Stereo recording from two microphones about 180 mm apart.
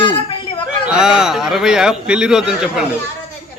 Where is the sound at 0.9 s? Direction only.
5° right (ahead or behind).